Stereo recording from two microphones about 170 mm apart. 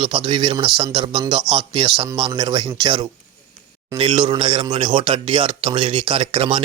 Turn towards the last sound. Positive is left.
turn(degrees=-30)  # may be behind; listen again after turning